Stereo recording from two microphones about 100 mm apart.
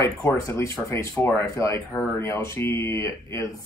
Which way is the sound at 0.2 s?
30° left (ahead or behind).